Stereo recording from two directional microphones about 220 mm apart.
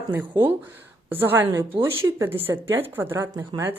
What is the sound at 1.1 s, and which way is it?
Speech, 10° right (ahead or behind).